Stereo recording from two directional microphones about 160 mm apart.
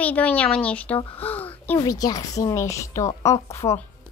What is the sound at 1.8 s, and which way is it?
A woman's voice, 25° left (ahead or behind).